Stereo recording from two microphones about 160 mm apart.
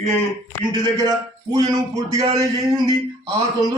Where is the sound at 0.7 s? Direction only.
25° right (ahead or behind).